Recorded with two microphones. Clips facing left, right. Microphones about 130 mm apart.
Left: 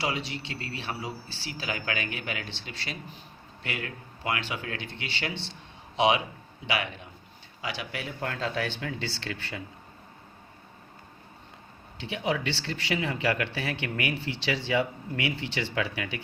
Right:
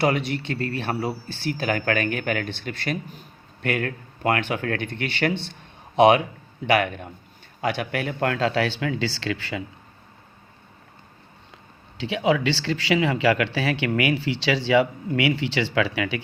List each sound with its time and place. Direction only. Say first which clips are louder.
0.0 s speech: right 9 dB; 55° right (ahead or behind); by 9.6 s 90° right
11.9 s speech: right 8 dB; 90° right